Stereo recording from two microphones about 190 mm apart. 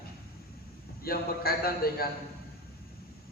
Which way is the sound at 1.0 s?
55° left (ahead or behind).